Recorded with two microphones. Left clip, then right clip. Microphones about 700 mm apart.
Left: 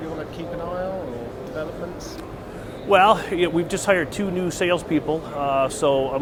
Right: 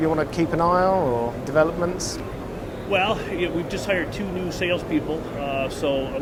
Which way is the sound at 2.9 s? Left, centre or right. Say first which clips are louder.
Left 7 dB; left.